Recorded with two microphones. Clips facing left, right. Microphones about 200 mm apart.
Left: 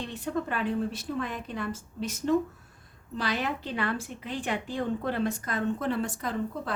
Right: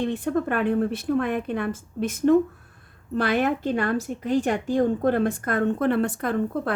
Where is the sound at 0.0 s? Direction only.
55° right (ahead or behind).